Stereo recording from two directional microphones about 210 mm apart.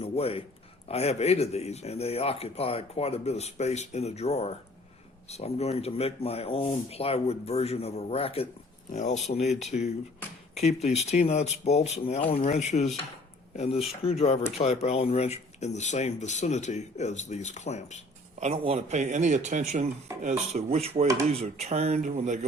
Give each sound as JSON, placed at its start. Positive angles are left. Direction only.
{"t": 0.0, "sound": "a man's voice", "side_deg": 30}
{"t": 18.3, "sound": "speech", "side_deg": -30}